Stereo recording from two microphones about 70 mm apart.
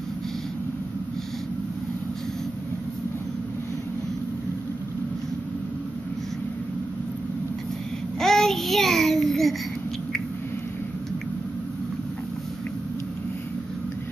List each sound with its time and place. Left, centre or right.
8.2 s child singing: centre